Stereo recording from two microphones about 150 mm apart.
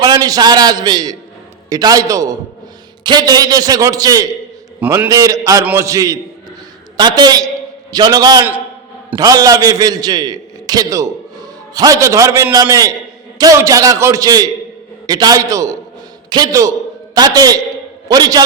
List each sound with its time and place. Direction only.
0.0 s a man's voice: 25° right (ahead or behind)